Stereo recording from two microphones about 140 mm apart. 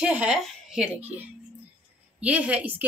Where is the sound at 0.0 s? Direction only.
5° right (ahead or behind).